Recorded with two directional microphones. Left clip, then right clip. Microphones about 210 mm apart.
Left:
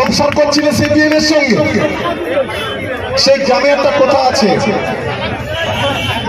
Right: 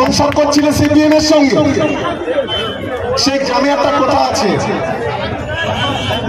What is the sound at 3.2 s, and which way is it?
A man's voice, 30° right (ahead or behind).